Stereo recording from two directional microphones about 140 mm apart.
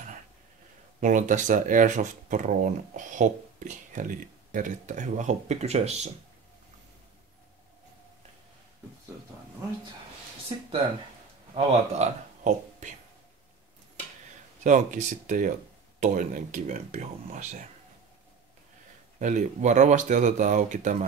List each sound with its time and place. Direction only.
1.0 s speech: 60° right (ahead or behind)
11.5 s speech: 55° right (ahead or behind)
14.6 s speech: 65° right (ahead or behind)
19.1 s speech: 60° right (ahead or behind)